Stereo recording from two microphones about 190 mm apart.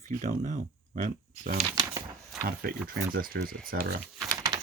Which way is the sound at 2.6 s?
50° right (ahead or behind).